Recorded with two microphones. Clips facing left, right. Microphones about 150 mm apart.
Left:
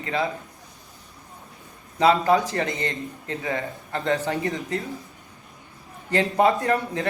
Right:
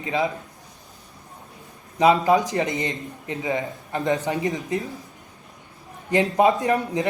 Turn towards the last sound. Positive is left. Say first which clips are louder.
# right 2 dB
turn(degrees=-20)  # may be behind; listen again after turning